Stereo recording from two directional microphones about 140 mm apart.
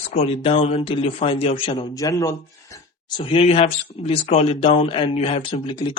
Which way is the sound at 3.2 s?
45° left (ahead or behind).